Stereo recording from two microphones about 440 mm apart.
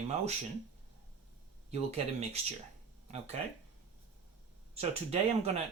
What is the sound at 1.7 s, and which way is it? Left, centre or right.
Speech, centre.